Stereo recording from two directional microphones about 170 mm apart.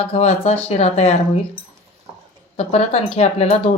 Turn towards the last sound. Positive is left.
turn(degrees=40)  # may be behind; listen again after turning